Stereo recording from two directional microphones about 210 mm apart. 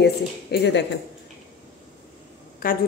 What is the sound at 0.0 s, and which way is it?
Speech, 50° left (ahead or behind).